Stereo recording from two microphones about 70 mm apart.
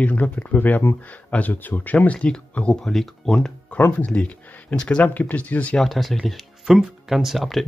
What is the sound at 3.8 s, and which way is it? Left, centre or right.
Speech, left.